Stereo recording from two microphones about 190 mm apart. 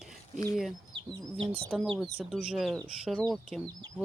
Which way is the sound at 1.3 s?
30° right (ahead or behind).